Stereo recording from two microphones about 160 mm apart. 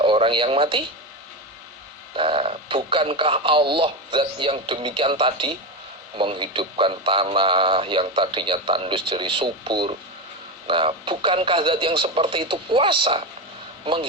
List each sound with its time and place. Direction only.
0.0 s speech: 30° right (ahead or behind)
2.1 s speech: 35° right (ahead or behind)